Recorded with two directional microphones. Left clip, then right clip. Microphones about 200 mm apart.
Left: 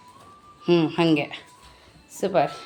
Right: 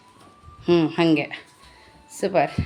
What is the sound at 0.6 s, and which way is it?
A woman's voice, 10° right (ahead or behind).